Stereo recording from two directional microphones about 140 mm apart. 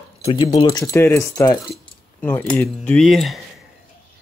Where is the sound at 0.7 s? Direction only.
20° left (ahead or behind).